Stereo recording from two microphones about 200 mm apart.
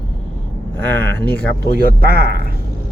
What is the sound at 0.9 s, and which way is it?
Speech, 10° left (ahead or behind).